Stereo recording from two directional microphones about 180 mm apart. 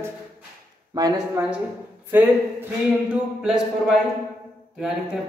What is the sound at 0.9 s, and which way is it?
A woman's voice, 20° right (ahead or behind).